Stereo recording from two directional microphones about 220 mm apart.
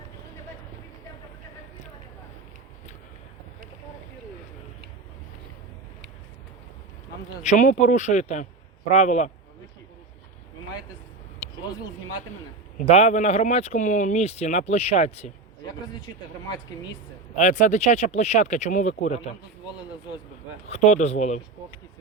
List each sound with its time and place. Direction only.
7.4 s speech: 35° left (ahead or behind)
12.7 s speech: 30° left (ahead or behind)
17.3 s speech: 35° left (ahead or behind)
20.7 s speech: 30° left (ahead or behind)